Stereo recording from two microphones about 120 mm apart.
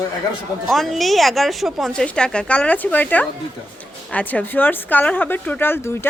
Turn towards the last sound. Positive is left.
turn(degrees=20)  # may be behind; listen again after turning